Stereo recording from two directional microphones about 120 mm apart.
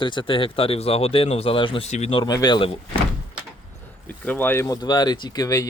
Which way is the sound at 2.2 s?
35° left (ahead or behind).